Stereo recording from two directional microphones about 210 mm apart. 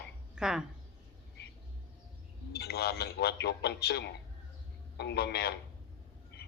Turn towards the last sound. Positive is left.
turn(degrees=50)  # may be behind; listen again after turning